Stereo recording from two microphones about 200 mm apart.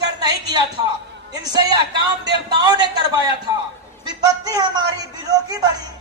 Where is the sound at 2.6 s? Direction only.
20° right (ahead or behind).